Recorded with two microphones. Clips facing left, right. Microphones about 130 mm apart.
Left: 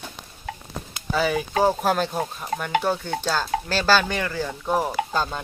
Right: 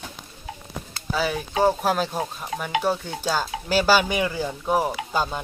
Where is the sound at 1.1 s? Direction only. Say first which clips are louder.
Left 3 dB; centre (ahead or behind).